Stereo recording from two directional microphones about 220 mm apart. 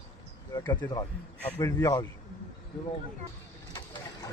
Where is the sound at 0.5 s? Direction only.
20° left (ahead or behind).